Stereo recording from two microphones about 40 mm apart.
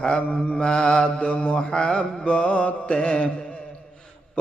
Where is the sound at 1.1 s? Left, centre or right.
Left.